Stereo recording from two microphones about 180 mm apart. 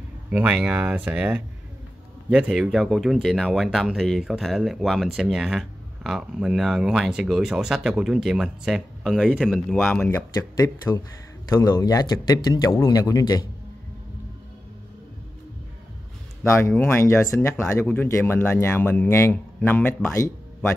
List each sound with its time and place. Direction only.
0.3 s speech: 5° right (ahead or behind); by 13.5 s 20° left (ahead or behind)
16.4 s speech: 15° left (ahead or behind)